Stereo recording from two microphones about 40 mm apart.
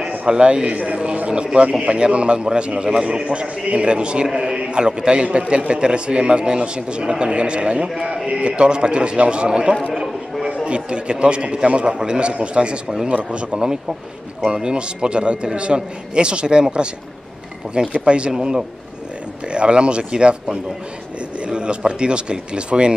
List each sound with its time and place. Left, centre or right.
0.3 s a man's voice: right
17.7 s a man's voice: right
18.3 s a man's voice: centre